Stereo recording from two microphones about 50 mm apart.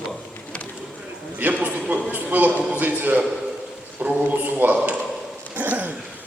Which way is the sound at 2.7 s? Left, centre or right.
Right.